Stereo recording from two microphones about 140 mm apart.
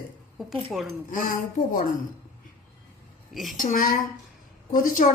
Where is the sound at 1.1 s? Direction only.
75° left (ahead or behind).